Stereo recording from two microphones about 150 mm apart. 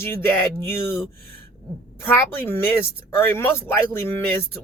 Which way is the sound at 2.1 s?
15° left (ahead or behind).